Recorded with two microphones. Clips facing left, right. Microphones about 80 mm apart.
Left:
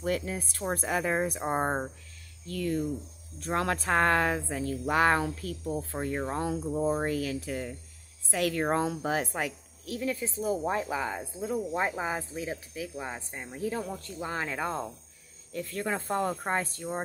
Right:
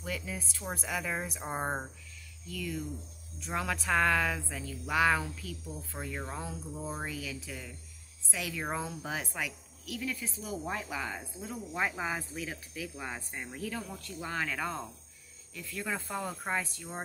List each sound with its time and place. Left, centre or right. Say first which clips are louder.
0.0 s speech: left 8 dB; left
0.7 s a woman's voice: left 7 dB; left
3.4 s speech: left 4 dB; left
5.7 s speech: left 11 dB; left
5.9 s a woman's voice: left 5 dB; left
6.3 s a woman's voice: left 10 dB; left; by 13.6 s centre
13.6 s speech: left 8 dB; left
15.5 s speech: left 5 dB; left